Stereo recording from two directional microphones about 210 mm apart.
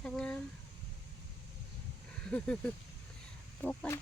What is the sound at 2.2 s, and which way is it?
Speech, 5° left (ahead or behind).